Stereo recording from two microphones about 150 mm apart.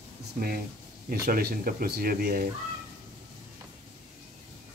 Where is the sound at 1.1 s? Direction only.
90° right.